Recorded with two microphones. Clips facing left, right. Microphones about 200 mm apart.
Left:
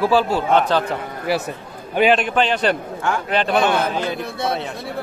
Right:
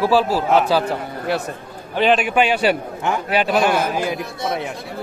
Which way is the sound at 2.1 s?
10° right (ahead or behind).